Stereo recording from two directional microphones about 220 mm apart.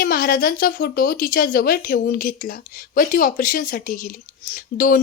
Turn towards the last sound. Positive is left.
turn(degrees=40)  # may be behind; listen again after turning